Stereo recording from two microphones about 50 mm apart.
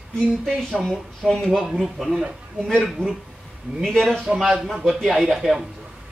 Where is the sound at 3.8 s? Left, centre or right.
Centre.